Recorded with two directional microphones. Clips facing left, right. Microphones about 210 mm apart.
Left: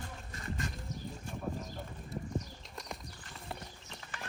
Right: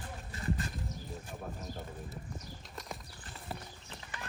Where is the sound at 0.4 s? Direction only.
35° right (ahead or behind).